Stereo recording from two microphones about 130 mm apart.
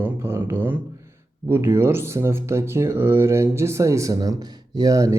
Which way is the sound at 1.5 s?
20° right (ahead or behind).